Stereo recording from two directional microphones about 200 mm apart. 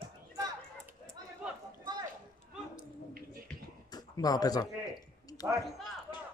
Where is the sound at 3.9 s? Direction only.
20° left (ahead or behind).